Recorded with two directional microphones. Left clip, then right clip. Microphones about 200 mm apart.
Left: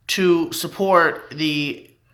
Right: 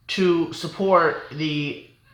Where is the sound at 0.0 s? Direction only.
20° left (ahead or behind).